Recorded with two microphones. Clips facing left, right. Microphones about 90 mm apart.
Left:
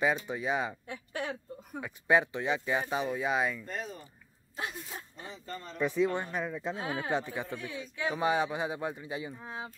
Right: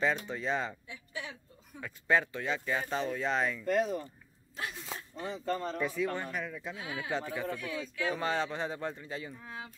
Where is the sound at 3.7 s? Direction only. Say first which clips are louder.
Right 10 dB; 70° right (ahead or behind).